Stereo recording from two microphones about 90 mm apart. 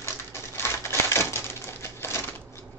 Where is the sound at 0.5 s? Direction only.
30° left (ahead or behind).